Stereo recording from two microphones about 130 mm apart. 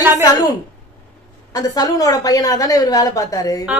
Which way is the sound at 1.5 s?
30° left (ahead or behind).